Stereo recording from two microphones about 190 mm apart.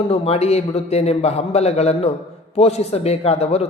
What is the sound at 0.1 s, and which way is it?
A man's voice, 35° left (ahead or behind).